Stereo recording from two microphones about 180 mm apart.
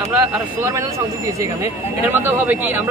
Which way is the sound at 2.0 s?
10° right (ahead or behind).